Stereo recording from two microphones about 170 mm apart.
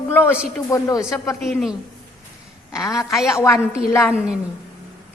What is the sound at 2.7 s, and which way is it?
Speech, 15° left (ahead or behind).